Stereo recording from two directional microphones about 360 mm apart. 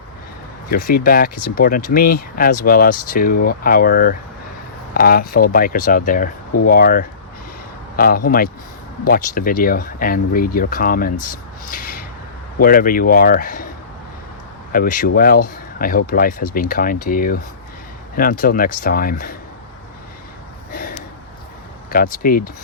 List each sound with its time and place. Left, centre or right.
0.7 s speech: left
14.7 s speech: left
21.8 s speech: left